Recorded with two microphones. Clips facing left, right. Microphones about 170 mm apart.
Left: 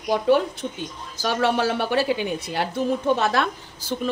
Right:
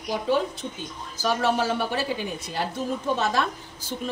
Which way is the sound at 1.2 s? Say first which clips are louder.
Left 2 dB; 70° left (ahead or behind).